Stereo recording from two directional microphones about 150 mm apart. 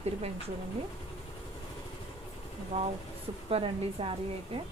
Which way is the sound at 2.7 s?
40° right (ahead or behind).